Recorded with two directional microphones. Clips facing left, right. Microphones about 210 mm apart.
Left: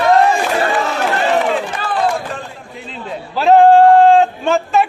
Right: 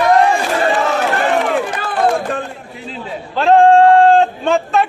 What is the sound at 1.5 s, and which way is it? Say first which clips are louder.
Run: right 1 dB; 55° right (ahead or behind).